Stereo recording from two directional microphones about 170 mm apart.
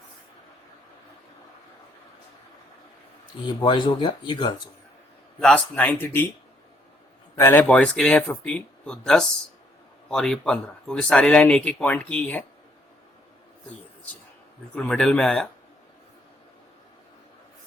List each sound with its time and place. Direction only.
3.4 s speech: 25° left (ahead or behind)
5.4 s speech: 5° left (ahead or behind)
7.3 s speech: 15° left (ahead or behind)
14.8 s speech: 5° left (ahead or behind)